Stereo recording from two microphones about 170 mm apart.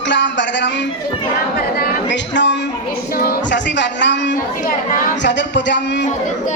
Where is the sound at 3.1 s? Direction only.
60° left (ahead or behind); by 4.3 s 90° left.